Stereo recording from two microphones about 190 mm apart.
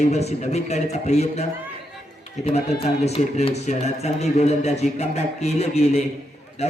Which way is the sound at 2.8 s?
35° left (ahead or behind).